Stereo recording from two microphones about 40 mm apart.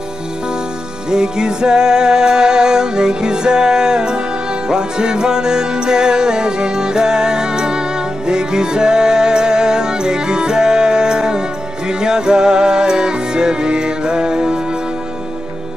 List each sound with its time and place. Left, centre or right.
1.1 s music: centre